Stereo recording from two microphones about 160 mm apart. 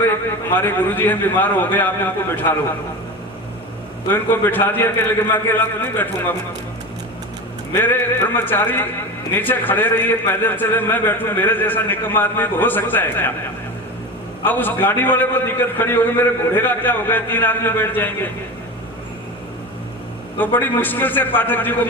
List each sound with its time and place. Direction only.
0.5 s a man's voice: 10° left (ahead or behind)
4.1 s a man's voice: 10° left (ahead or behind)
7.7 s a man's voice: 15° left (ahead or behind)
14.4 s a man's voice: 10° left (ahead or behind)
20.4 s a man's voice: 10° left (ahead or behind)